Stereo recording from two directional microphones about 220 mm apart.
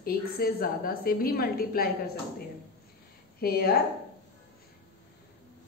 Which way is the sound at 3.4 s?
45° left (ahead or behind).